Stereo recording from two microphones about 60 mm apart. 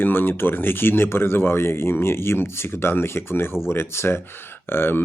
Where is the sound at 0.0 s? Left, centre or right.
Left.